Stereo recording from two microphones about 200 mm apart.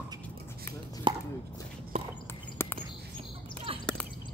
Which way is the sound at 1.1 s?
25° right (ahead or behind).